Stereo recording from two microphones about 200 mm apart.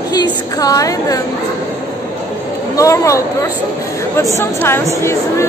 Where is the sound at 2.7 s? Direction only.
15° left (ahead or behind).